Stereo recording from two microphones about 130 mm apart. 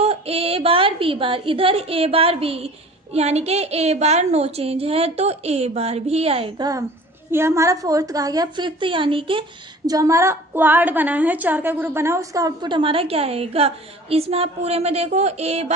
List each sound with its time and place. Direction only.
0.0 s a woman's voice: 50° right (ahead or behind)
6.6 s a woman's voice: 30° right (ahead or behind)
9.8 s a woman's voice: 25° right (ahead or behind); by 15.6 s 55° right (ahead or behind)